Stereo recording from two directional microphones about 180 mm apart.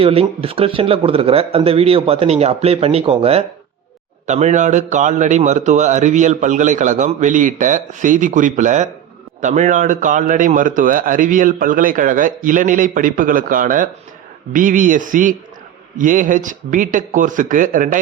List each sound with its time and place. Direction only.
0.0 s a man's voice: 30° right (ahead or behind); by 18.0 s 45° right (ahead or behind)